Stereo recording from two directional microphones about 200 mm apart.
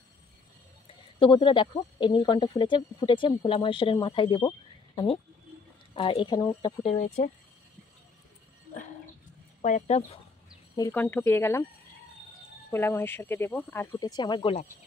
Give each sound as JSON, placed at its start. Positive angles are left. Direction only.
{"t": 1.2, "sound": "speech", "side_deg": 25}
{"t": 9.6, "sound": "speech", "side_deg": 35}
{"t": 10.8, "sound": "speech", "side_deg": 10}
{"t": 12.7, "sound": "speech", "side_deg": 10}
{"t": 13.9, "sound": "speech", "side_deg": 20}